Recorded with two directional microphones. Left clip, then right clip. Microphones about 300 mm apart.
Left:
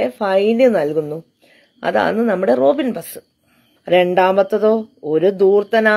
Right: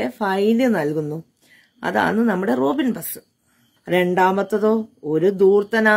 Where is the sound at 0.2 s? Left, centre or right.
Centre.